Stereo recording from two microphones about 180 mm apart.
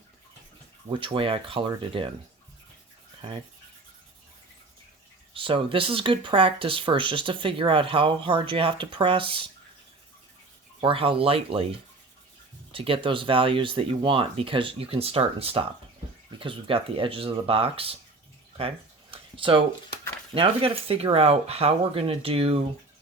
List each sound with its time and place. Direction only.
0.9 s speech: 25° right (ahead or behind)
3.2 s rub: 30° right (ahead or behind)
5.3 s speech: 30° right (ahead or behind)
10.8 s speech: 30° right (ahead or behind)
19.1 s a sound: 30° right (ahead or behind)
20.3 s speech: 30° right (ahead or behind)